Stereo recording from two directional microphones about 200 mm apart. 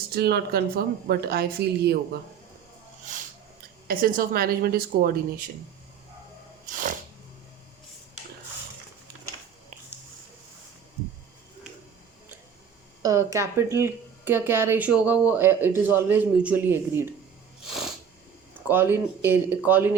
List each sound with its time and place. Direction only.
0.1 s a woman's voice: 50° right (ahead or behind)
3.8 s a woman's voice: 45° right (ahead or behind)
6.7 s a sound: 40° right (ahead or behind)
13.0 s speech: 15° right (ahead or behind)
17.6 s a sound: centre (ahead or behind)
18.7 s speech: 10° right (ahead or behind)